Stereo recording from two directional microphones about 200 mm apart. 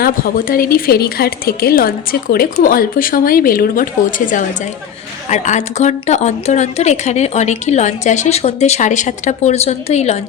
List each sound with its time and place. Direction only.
0.0 s a woman's voice: 45° left (ahead or behind)